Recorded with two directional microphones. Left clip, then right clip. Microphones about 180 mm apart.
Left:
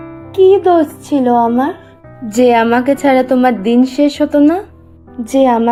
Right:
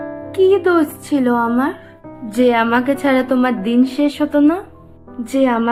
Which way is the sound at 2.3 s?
25° left (ahead or behind).